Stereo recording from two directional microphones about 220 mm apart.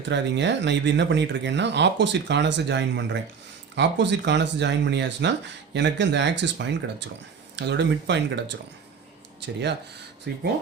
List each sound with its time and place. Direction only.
0.1 s speech: 55° right (ahead or behind)
10.3 s speech: 50° right (ahead or behind)